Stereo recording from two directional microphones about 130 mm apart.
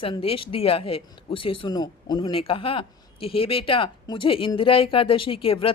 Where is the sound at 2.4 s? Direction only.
45° left (ahead or behind).